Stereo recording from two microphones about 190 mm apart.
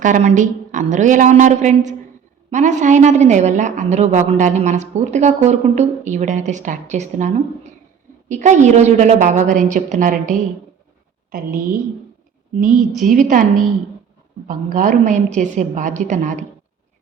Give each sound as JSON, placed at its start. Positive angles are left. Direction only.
{"t": 0.0, "sound": "a woman's voice", "side_deg": -40}
{"t": 13.0, "sound": "a woman's voice", "side_deg": -40}
{"t": 14.4, "sound": "a woman's voice", "side_deg": -45}